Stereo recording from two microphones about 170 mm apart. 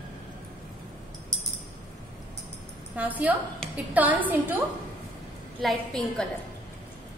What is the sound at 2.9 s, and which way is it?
A woman's voice, 10° right (ahead or behind).